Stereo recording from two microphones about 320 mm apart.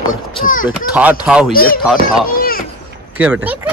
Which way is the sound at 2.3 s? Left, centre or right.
Left.